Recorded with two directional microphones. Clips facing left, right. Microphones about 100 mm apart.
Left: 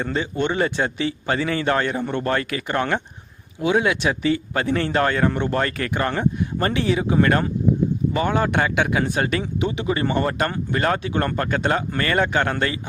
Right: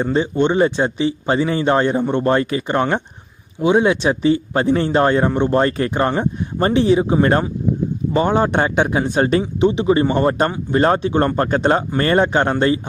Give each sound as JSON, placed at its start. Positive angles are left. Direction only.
{"t": 0.0, "sound": "a man's voice", "side_deg": -25}